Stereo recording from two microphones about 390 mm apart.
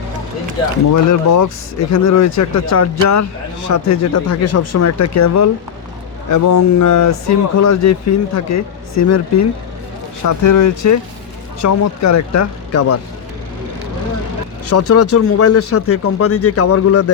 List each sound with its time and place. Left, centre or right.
1.3 s speech: left
14.7 s speech: left